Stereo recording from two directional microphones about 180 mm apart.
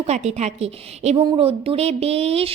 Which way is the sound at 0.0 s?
35° right (ahead or behind).